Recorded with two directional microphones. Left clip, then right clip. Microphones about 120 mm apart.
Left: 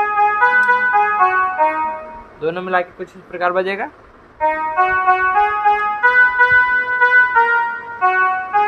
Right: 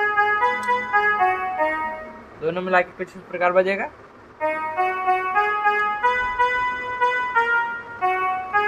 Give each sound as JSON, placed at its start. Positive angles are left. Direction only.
{"t": 0.0, "sound": "trumpet", "side_deg": -15}
{"t": 0.7, "sound": "music", "side_deg": -15}
{"t": 2.4, "sound": "a man's voice", "side_deg": 20}
{"t": 4.4, "sound": "trumpet", "side_deg": -15}